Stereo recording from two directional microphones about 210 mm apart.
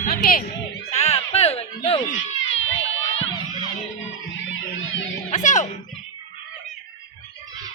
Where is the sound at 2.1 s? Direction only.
65° left (ahead or behind).